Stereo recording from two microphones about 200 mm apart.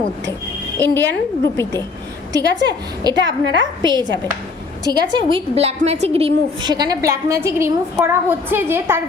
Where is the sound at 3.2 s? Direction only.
65° right (ahead or behind).